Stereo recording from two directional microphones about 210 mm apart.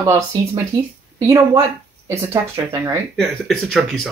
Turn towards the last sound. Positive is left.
turn(degrees=0)  # may be behind; listen again after turning